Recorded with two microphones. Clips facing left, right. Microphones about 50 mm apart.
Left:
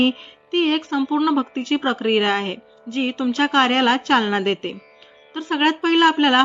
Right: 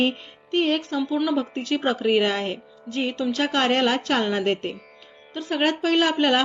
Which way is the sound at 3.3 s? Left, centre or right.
Left.